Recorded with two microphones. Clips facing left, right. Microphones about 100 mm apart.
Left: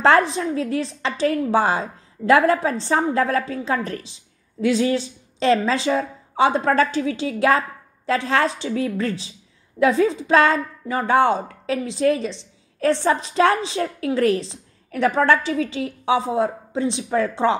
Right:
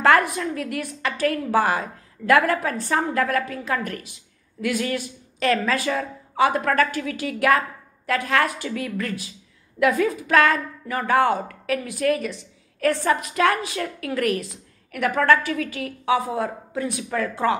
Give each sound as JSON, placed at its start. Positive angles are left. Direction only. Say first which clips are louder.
{"t": 0.0, "sound": "a woman's voice", "louder": "left 2 dB", "side_deg": 25}